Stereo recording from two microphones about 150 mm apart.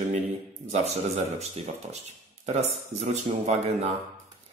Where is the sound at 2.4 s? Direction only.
50° right (ahead or behind).